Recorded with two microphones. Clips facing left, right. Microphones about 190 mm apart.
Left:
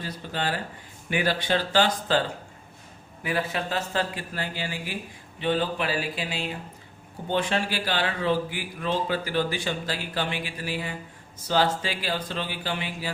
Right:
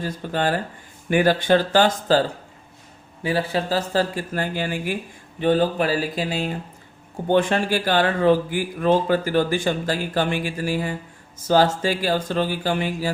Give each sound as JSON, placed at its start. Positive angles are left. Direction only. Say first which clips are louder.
{"t": 0.0, "sound": "speech", "louder": "right 7 dB", "side_deg": -45}
{"t": 3.2, "sound": "speech", "louder": "right 6 dB", "side_deg": -30}